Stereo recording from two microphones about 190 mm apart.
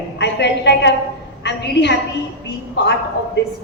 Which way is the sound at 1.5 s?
65° left (ahead or behind).